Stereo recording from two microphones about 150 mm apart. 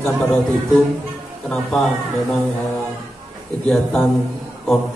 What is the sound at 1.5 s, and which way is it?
Speech, 5° left (ahead or behind).